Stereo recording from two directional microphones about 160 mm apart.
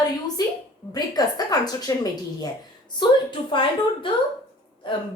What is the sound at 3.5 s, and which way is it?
Speech, 30° left (ahead or behind).